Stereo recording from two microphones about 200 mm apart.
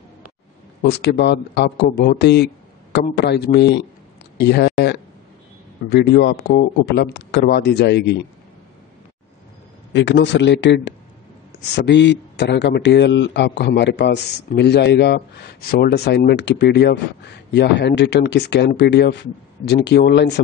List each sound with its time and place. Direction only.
0.8 s a man's voice: 55° left (ahead or behind)
9.9 s a man's voice: 60° left (ahead or behind)